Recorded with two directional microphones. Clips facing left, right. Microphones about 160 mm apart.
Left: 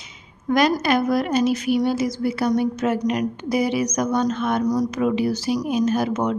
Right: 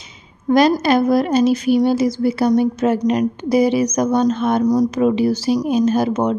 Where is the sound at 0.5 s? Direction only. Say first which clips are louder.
Right 5 dB; 30° right (ahead or behind).